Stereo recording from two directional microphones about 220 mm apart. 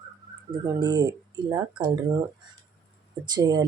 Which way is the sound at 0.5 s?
15° right (ahead or behind).